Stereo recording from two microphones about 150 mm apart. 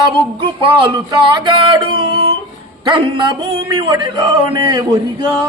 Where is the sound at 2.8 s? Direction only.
30° right (ahead or behind).